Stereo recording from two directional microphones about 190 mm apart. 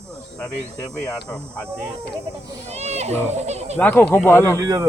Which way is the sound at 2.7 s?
35° right (ahead or behind).